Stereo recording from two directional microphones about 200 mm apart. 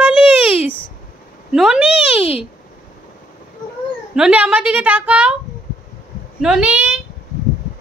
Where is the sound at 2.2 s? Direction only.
25° left (ahead or behind).